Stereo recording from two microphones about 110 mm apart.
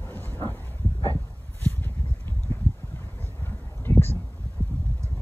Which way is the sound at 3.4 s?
20° left (ahead or behind).